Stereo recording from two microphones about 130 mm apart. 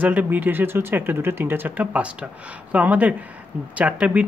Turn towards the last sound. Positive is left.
turn(degrees=-10)  # may be behind; listen again after turning